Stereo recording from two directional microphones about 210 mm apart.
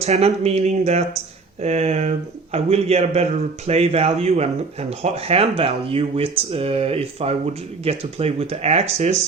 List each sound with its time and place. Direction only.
0.0 s speech: 30° right (ahead or behind)